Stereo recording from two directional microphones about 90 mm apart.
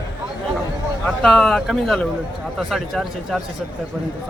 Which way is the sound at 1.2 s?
5° left (ahead or behind).